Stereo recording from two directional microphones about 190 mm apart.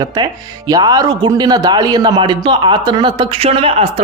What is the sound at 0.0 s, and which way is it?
Speech, 20° right (ahead or behind).